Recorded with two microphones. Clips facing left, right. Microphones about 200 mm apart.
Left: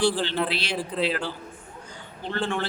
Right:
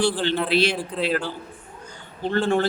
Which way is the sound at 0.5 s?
50° right (ahead or behind).